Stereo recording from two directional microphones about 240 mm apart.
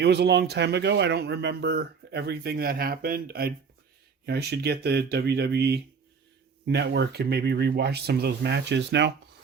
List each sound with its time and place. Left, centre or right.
0.0 s speech: right